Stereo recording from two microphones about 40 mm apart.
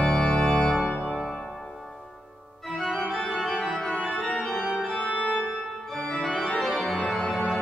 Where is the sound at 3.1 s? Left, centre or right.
Centre.